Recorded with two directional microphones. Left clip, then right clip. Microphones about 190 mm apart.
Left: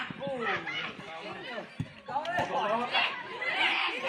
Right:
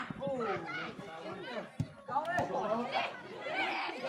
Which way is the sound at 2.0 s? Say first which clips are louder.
Left 2 dB; 40° left (ahead or behind).